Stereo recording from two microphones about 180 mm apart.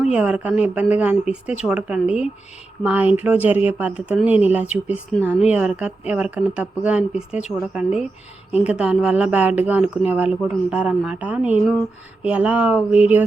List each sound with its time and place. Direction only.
0.0 s speech: 5° right (ahead or behind)